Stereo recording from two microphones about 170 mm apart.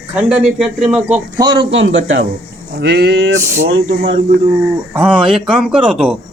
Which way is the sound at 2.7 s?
70° right (ahead or behind).